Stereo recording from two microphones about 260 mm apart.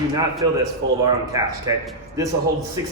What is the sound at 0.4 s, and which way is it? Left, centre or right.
A man's voice, centre.